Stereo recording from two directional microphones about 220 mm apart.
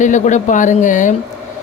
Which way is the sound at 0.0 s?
35° left (ahead or behind).